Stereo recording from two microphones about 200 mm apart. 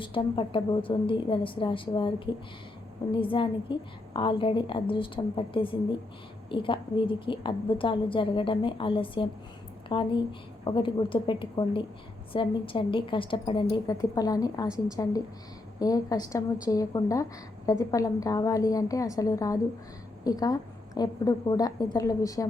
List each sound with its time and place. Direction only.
0.0 s a woman's voice: 25° left (ahead or behind)